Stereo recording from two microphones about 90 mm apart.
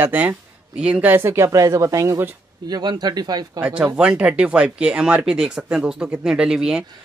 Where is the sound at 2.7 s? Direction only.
50° right (ahead or behind).